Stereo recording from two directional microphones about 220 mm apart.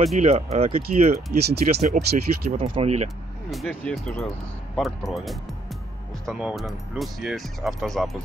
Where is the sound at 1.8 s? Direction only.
35° right (ahead or behind).